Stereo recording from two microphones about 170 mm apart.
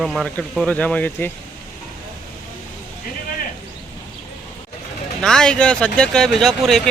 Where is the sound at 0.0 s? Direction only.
Centre (ahead or behind).